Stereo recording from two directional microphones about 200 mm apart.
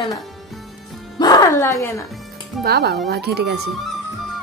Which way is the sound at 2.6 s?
55° right (ahead or behind).